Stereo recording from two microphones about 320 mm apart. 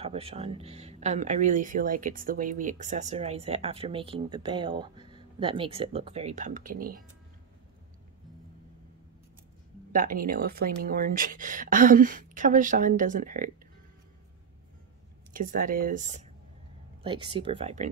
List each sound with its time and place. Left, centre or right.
0.0 s speech: centre
9.9 s speech: right
15.3 s speech: right
17.0 s speech: centre